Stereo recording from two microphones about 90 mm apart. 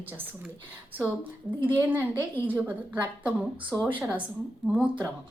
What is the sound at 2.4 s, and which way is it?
Speech, 20° right (ahead or behind).